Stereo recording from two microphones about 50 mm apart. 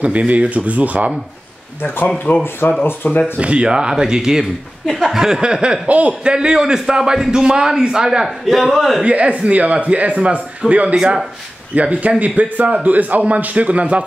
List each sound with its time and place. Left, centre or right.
0.0 s speech: right
2.1 s speech: left
3.3 s a man's voice: right
8.5 s a man's voice: centre
9.0 s a man's voice: right